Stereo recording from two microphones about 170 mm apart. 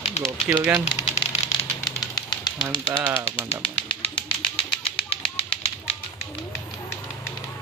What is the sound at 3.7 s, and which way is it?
Typewriter, 30° left (ahead or behind).